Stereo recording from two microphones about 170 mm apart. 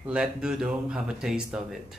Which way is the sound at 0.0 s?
5° right (ahead or behind).